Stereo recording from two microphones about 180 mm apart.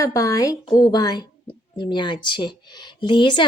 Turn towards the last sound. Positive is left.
turn(degrees=25)  # may be behind; listen again after turning